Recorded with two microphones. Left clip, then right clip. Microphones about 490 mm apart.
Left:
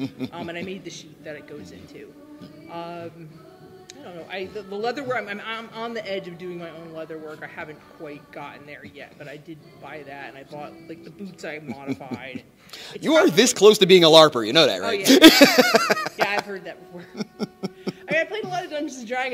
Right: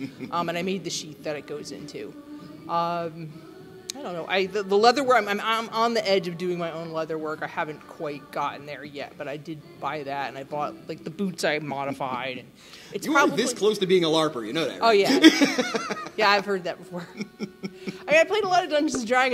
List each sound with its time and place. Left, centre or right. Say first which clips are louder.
0.3 s a man's voice: right 6 dB; right
13.0 s speech: left 5 dB; left
14.8 s a man's voice: right 6 dB; right
15.0 s speech: left 6 dB; left
17.2 s chuckle: left 4 dB; left
18.0 s a man's voice: right 5 dB; right